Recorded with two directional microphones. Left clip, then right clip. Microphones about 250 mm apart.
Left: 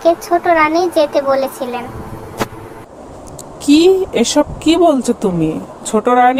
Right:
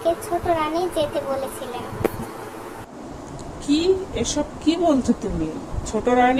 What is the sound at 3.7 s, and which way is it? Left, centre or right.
Speech, left.